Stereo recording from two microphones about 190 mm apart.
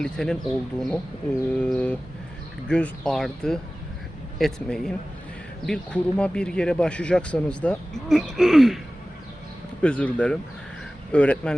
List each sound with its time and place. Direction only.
0.0 s speech: 5° left (ahead or behind)
9.8 s speech: 5° left (ahead or behind)